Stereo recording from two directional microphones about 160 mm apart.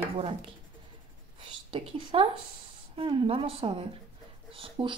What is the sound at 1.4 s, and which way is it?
A woman's voice, 30° right (ahead or behind).